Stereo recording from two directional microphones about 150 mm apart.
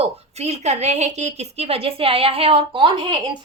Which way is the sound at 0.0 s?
45° right (ahead or behind).